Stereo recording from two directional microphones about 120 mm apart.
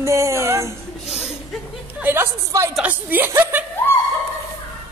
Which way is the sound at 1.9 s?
15° right (ahead or behind).